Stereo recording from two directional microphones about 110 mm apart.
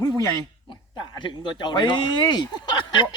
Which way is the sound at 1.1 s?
45° left (ahead or behind).